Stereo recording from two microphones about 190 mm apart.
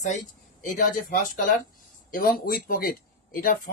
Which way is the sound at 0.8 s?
45° left (ahead or behind).